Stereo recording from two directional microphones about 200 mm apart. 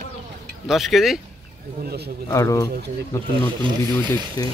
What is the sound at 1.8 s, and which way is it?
Speech, 55° right (ahead or behind).